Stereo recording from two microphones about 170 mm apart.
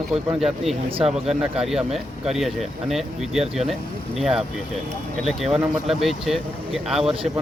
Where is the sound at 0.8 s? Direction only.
35° right (ahead or behind).